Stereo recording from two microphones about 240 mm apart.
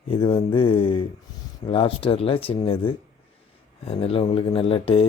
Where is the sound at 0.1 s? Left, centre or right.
Left.